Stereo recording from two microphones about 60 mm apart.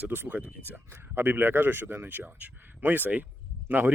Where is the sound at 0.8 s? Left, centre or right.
Right.